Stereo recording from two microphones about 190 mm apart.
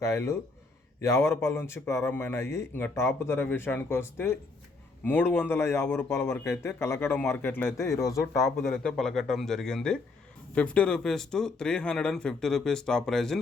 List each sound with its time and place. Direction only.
0.0 s a man's voice: 15° left (ahead or behind)
8.4 s speech: centre (ahead or behind)